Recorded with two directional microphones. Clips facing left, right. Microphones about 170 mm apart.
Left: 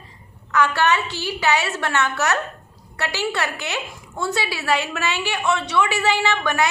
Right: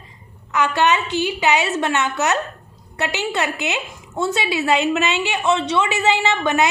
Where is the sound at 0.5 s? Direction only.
20° right (ahead or behind).